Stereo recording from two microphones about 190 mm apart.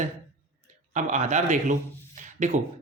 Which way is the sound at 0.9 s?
40° right (ahead or behind).